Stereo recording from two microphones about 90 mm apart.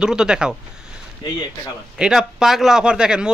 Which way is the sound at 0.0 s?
10° right (ahead or behind).